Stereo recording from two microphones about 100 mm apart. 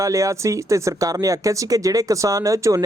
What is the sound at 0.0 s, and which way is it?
Speech, 30° right (ahead or behind).